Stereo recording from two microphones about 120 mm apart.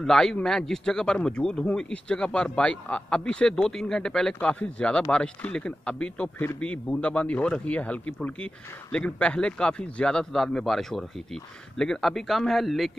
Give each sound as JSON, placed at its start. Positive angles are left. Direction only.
{"t": 0.0, "sound": "a man's voice", "side_deg": 5}
{"t": 6.3, "sound": "a man's voice", "side_deg": 20}